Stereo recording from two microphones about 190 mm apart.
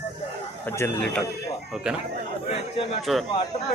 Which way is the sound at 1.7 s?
5° right (ahead or behind).